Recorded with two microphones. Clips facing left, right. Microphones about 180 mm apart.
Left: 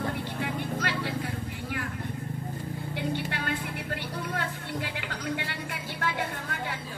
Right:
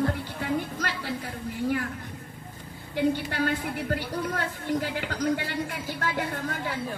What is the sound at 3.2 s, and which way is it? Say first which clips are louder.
A woman's voice: right 5 dB; 40° right (ahead or behind).